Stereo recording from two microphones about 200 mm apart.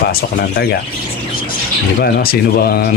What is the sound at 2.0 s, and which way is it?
Speech, 50° left (ahead or behind).